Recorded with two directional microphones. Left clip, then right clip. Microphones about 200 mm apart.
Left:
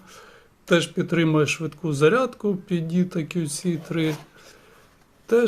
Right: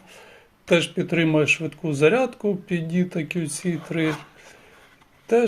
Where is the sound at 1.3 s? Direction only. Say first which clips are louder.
Right 2 dB; 30° left (ahead or behind).